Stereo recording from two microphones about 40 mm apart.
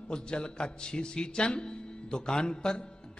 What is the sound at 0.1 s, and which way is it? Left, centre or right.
A man's voice, left.